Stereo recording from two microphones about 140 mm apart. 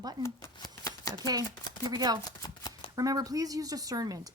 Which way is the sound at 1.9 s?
30° right (ahead or behind).